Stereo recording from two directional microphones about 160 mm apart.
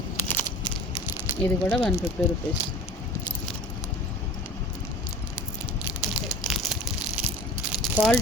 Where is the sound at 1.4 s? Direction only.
5° left (ahead or behind).